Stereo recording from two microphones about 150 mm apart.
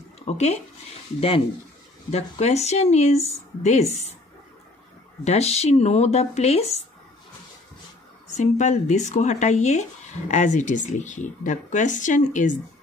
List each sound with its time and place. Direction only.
0.2 s speech: 45° left (ahead or behind)
2.0 s speech: 45° left (ahead or behind)
5.2 s speech: 45° left (ahead or behind)
8.4 s speech: 50° left (ahead or behind)